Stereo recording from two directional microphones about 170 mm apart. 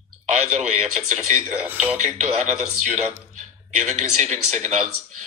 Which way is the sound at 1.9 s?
45° right (ahead or behind).